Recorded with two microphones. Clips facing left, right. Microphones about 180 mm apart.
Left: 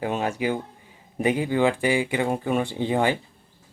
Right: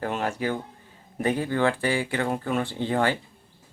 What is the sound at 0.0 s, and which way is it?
Speech, 15° left (ahead or behind).